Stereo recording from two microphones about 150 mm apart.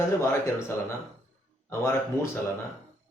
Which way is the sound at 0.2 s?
15° left (ahead or behind).